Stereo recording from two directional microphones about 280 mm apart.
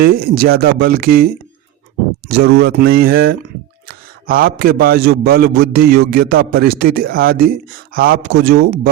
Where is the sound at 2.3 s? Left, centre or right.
Right.